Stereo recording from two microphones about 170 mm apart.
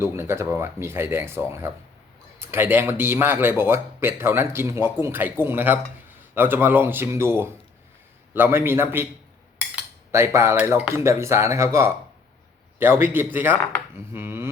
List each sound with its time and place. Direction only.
0.0 s speech: 15° right (ahead or behind)
10.1 s speech: 15° right (ahead or behind)